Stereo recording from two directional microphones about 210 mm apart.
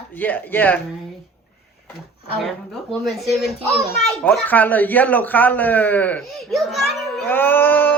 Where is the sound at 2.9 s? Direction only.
Centre (ahead or behind).